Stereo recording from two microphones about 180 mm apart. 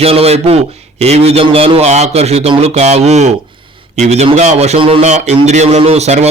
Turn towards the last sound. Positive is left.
turn(degrees=-35)  # may be behind; listen again after turning